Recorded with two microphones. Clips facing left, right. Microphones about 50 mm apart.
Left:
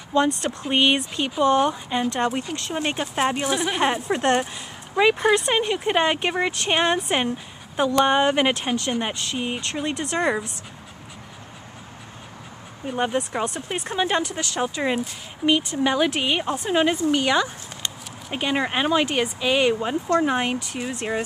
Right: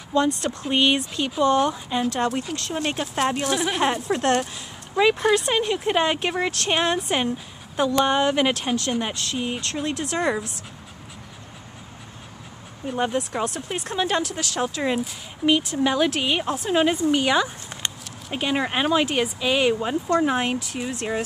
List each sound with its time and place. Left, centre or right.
0.1 s speech: left
12.8 s speech: centre